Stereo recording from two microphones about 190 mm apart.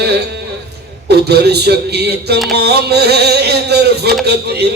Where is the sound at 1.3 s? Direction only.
60° right (ahead or behind).